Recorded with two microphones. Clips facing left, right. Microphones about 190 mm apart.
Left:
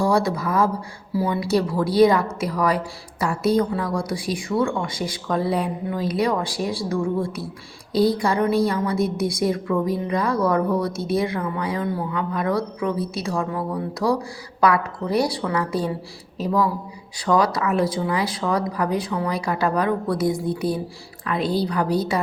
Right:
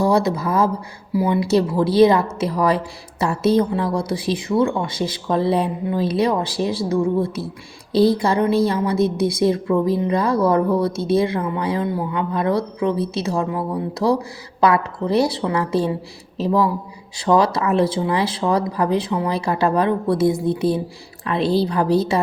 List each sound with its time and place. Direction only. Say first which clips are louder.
0.0 s a woman's voice: right 3 dB; 20° right (ahead or behind)